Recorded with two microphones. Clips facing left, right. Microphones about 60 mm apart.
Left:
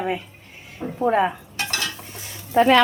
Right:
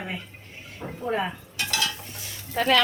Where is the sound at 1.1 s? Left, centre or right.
Left.